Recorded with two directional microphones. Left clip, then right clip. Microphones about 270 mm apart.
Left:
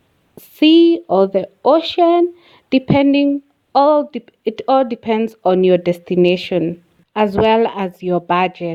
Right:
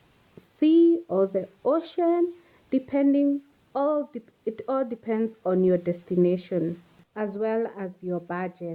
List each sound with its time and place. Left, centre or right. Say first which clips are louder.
0.6 s speech: left 9 dB; left